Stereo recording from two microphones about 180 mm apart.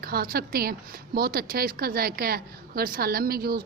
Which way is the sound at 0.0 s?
55° right (ahead or behind).